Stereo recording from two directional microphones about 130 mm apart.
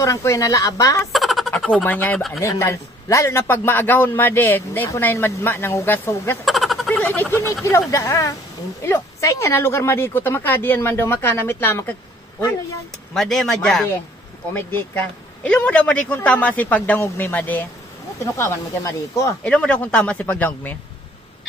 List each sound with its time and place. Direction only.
0.0 s speech: 25° left (ahead or behind)
1.1 s a sound: centre (ahead or behind)
1.5 s speech: 10° left (ahead or behind)
2.1 s speech: centre (ahead or behind)
2.4 s a man's voice: 20° left (ahead or behind)
6.4 s a sound: centre (ahead or behind)
7.0 s a sound: 15° left (ahead or behind)
7.9 s a man's voice: 25° left (ahead or behind)
13.1 s speech: centre (ahead or behind)
14.5 s a man's voice: 15° left (ahead or behind)
18.2 s speech: 25° left (ahead or behind)
19.4 s a man's voice: 10° left (ahead or behind)